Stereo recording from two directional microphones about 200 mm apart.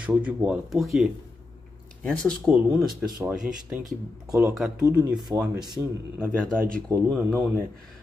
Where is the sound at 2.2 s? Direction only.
Centre (ahead or behind); by 7.1 s 15° right (ahead or behind).